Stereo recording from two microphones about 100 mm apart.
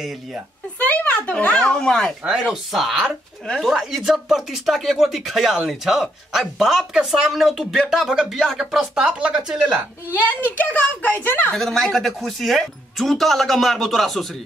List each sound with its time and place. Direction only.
0.7 s speech: 15° left (ahead or behind); by 9.8 s 5° right (ahead or behind)
10.1 s speech: 15° left (ahead or behind)
11.5 s speech: 5° left (ahead or behind)